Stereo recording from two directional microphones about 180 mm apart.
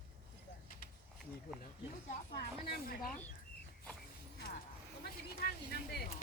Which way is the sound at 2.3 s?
65° left (ahead or behind).